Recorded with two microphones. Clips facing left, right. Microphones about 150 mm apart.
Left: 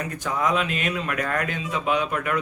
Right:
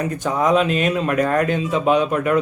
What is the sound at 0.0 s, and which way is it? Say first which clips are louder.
Speech: right 6 dB; 25° right (ahead or behind).